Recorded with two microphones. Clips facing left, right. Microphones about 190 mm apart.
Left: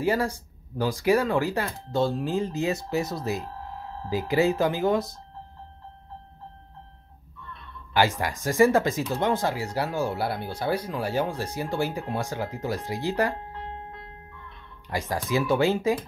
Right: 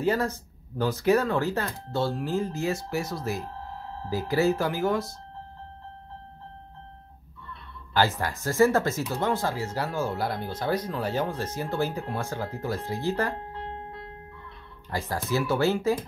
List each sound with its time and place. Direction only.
0.0 s speech: 10° left (ahead or behind)
8.4 s speech: 15° left (ahead or behind)
14.9 s speech: 15° left (ahead or behind)